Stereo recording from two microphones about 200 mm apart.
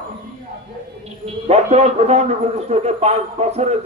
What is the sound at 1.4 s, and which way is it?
A man's voice, 35° right (ahead or behind).